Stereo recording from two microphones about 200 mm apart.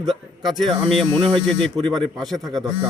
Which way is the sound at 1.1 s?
25° right (ahead or behind).